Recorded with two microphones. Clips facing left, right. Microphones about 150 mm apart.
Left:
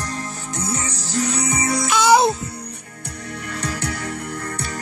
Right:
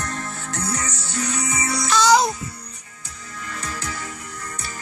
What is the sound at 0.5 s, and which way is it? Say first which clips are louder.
Music: left 2 dB; 25° left (ahead or behind).